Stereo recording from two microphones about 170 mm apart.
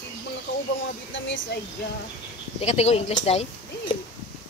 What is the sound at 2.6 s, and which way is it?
Speech, 40° left (ahead or behind).